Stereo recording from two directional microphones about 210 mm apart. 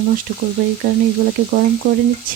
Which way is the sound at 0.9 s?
50° right (ahead or behind).